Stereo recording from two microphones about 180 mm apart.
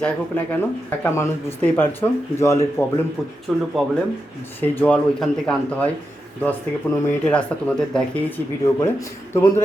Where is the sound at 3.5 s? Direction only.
Centre (ahead or behind).